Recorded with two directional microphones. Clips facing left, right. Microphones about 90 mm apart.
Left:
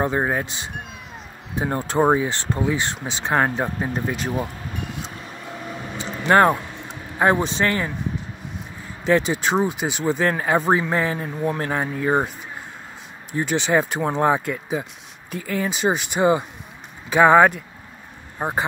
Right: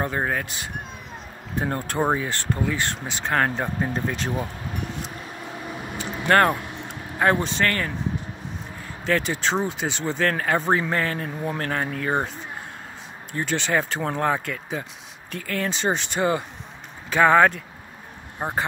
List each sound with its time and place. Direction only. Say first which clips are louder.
0.0 s speech: left 4 dB; 20° left (ahead or behind)
6.2 s a man's voice: left 3 dB; 15° left (ahead or behind)
9.0 s speech: left 4 dB; 20° left (ahead or behind)
13.3 s speech: left 4 dB; 15° left (ahead or behind)